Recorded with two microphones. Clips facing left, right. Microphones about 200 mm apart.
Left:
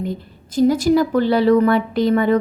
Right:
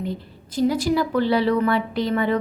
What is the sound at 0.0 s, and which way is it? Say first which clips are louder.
A woman's voice: left 3 dB; 45° left (ahead or behind).